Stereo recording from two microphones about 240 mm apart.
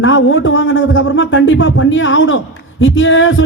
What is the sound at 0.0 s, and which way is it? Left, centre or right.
Speech, left.